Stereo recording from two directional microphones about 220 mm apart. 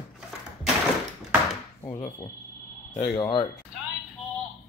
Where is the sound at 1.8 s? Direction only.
15° left (ahead or behind).